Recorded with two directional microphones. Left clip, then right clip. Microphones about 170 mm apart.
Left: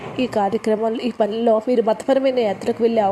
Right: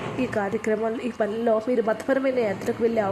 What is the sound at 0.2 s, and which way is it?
A woman's voice, 15° left (ahead or behind).